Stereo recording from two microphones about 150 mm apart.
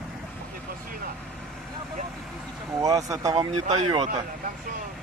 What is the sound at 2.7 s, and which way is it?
Speech, 20° right (ahead or behind).